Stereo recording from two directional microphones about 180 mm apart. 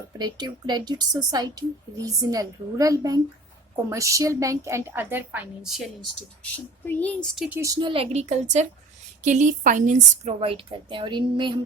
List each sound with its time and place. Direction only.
0.2 s a woman's voice: 20° right (ahead or behind); by 5.9 s centre (ahead or behind)
6.4 s speech: 10° left (ahead or behind)
7.3 s speech: centre (ahead or behind)
7.6 s a woman's voice: 25° right (ahead or behind); by 10.3 s 45° right (ahead or behind)
10.4 s speech: 30° right (ahead or behind)